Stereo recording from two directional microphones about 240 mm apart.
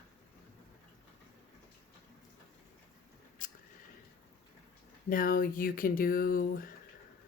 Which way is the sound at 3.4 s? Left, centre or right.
Left.